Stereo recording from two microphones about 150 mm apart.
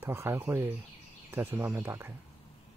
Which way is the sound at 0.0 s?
15° right (ahead or behind).